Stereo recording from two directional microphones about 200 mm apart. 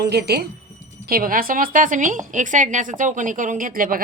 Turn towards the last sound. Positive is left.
turn(degrees=-45)  # may be behind; listen again after turning